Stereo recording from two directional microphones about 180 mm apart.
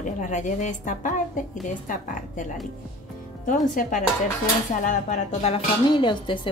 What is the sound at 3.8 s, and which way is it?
A woman's voice, 50° left (ahead or behind).